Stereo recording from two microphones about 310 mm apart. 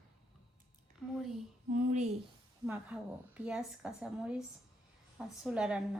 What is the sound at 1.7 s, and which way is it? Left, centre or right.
Speech, right.